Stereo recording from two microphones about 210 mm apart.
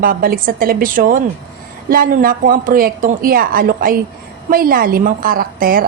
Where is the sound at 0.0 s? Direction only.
45° right (ahead or behind).